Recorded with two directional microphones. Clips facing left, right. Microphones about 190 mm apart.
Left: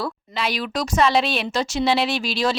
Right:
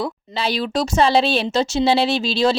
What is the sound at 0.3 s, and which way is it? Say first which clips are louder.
Speech: right 4 dB; 30° right (ahead or behind).